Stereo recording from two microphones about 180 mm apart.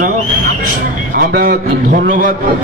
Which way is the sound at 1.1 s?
55° right (ahead or behind).